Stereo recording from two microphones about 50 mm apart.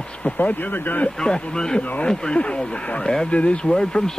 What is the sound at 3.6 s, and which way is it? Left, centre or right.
Speech, centre.